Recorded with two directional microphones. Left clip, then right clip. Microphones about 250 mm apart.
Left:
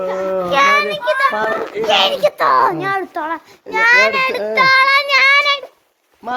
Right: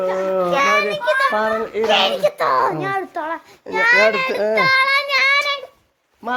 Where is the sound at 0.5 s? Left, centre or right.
Centre.